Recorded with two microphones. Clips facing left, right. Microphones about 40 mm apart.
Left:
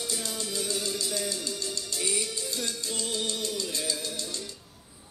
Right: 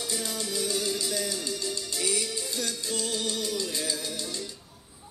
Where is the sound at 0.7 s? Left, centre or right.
Right.